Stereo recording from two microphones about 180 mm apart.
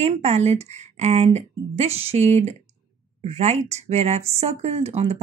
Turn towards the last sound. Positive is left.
turn(degrees=-35)  # may be behind; listen again after turning